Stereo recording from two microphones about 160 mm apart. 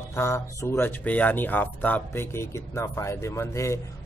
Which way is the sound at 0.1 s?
15° left (ahead or behind).